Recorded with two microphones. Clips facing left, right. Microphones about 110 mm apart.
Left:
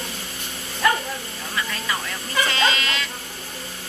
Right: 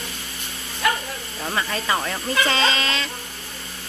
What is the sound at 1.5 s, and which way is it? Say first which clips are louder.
Speech: right 4 dB; 45° right (ahead or behind).